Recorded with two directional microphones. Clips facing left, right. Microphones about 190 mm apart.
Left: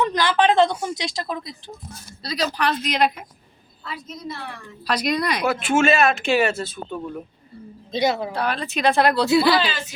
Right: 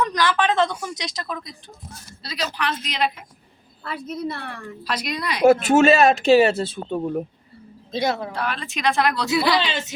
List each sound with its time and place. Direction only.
0.0 s a woman's voice: 25° left (ahead or behind)
2.2 s speech: 40° left (ahead or behind)
3.8 s a woman's voice: 55° right (ahead or behind)
4.9 s speech: 40° left (ahead or behind)
5.4 s speech: 45° right (ahead or behind)
7.9 s speech: centre (ahead or behind)
8.4 s speech: 40° left (ahead or behind)